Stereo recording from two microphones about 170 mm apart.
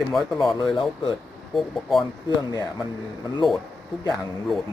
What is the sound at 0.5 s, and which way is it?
Speech, 30° left (ahead or behind).